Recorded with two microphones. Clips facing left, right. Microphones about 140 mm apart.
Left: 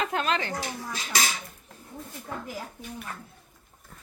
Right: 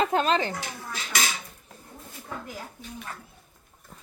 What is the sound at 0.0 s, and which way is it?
Speech, 35° right (ahead or behind).